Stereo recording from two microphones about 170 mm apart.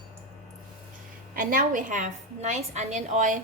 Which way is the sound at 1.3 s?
55° right (ahead or behind).